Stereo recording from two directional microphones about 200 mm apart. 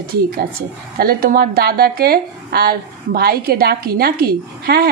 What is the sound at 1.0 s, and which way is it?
Speech, 50° right (ahead or behind).